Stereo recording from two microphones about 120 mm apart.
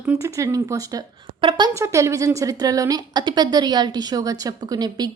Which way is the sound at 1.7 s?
25° right (ahead or behind).